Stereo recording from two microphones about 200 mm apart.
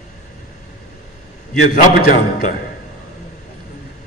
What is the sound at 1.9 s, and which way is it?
Speech, 50° left (ahead or behind).